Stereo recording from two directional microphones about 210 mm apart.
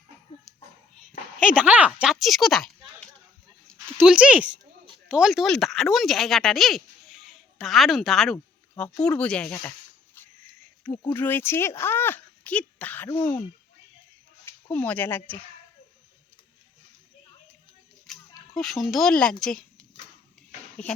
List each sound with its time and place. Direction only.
1.1 s a sound: 40° left (ahead or behind)
1.5 s speech: 5° right (ahead or behind)
3.7 s dog: 5° left (ahead or behind)
4.0 s speech: 5° right (ahead or behind)
11.1 s speech: 10° left (ahead or behind)
14.4 s speech: 10° left (ahead or behind)
18.1 s a sound: centre (ahead or behind)
18.5 s speech: centre (ahead or behind)